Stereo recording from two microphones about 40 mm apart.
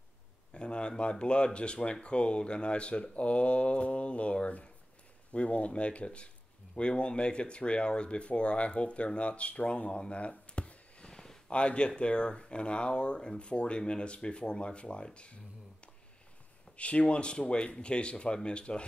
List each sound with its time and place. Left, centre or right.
0.6 s speech: left
9.8 s a sound: left
11.4 s speech: left
16.7 s speech: left